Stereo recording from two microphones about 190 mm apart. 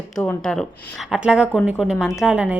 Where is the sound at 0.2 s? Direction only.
Centre (ahead or behind).